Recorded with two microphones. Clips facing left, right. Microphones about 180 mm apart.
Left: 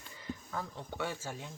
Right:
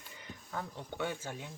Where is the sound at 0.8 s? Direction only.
20° right (ahead or behind).